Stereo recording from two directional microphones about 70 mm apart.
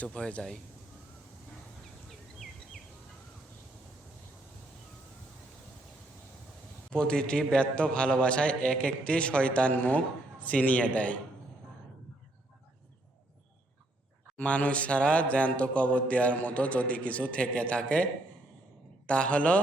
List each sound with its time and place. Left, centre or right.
0.1 s speech: centre
2.0 s a sound: centre
6.9 s a man's voice: centre
14.3 s speech: centre